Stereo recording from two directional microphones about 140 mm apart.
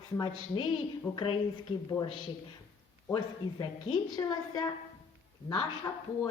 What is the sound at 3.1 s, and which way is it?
Speech, 30° left (ahead or behind).